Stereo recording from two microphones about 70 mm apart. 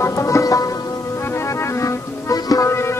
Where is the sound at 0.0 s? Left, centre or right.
Left.